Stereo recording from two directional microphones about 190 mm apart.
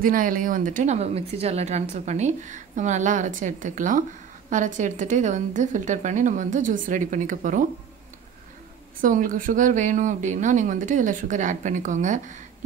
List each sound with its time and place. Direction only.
0.0 s speech: 45° right (ahead or behind)
9.0 s speech: 45° right (ahead or behind)